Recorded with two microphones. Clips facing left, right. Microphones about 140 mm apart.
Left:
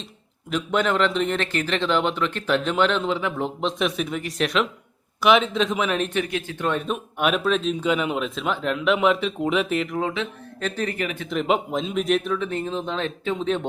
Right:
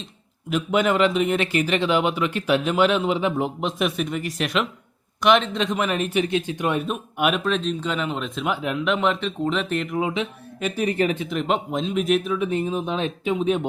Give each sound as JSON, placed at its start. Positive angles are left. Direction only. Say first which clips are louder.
{"t": 0.5, "sound": "speech", "louder": "right 2 dB", "side_deg": -10}
{"t": 6.1, "sound": "speech", "louder": "right 3 dB", "side_deg": -20}
{"t": 6.8, "sound": "speech", "louder": "right 1 dB", "side_deg": 0}
{"t": 10.0, "sound": "speech", "louder": "right 1 dB", "side_deg": -15}
{"t": 10.9, "sound": "speech", "louder": "right 6 dB", "side_deg": -30}
{"t": 11.3, "sound": "speech", "louder": "left 1 dB", "side_deg": 0}
{"t": 12.4, "sound": "speech", "louder": "right 3 dB", "side_deg": -15}